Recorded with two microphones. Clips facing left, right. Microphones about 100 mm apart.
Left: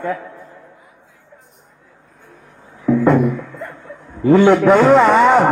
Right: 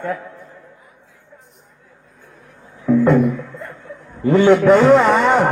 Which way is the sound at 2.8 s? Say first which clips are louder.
Even; 5° left (ahead or behind).